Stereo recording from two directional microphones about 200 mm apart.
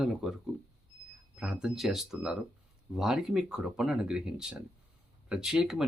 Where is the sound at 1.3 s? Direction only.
5° right (ahead or behind).